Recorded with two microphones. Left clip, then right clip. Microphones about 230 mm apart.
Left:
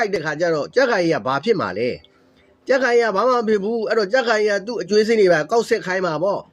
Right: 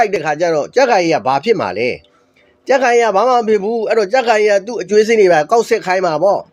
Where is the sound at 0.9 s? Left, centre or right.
Right.